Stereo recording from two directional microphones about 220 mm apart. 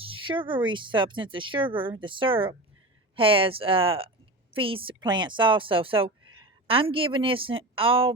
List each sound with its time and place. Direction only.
0.0 s speech: 25° right (ahead or behind)